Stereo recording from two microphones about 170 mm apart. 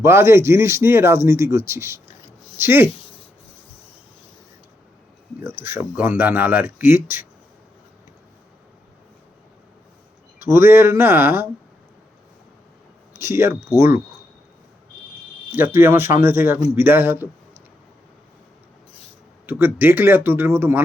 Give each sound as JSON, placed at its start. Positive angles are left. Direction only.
{"t": 0.0, "sound": "speech", "side_deg": -15}
{"t": 5.4, "sound": "speech", "side_deg": -15}
{"t": 10.4, "sound": "speech", "side_deg": -15}
{"t": 13.1, "sound": "speech", "side_deg": -15}
{"t": 15.5, "sound": "speech", "side_deg": -15}
{"t": 19.5, "sound": "speech", "side_deg": -10}